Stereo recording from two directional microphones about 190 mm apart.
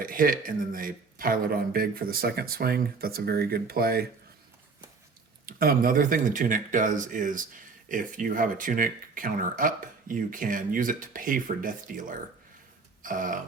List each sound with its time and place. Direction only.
0.0 s speech: 45° right (ahead or behind)
5.5 s speech: 50° right (ahead or behind)
13.0 s a sound: 45° right (ahead or behind)